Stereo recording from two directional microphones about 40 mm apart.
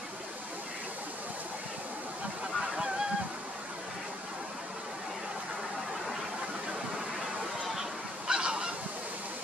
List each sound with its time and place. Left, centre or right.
8.3 s goose: right